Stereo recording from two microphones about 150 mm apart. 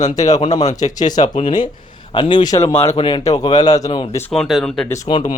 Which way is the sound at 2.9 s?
35° left (ahead or behind).